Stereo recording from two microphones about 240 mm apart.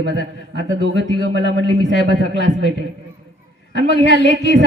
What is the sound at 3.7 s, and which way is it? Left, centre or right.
Speech, left.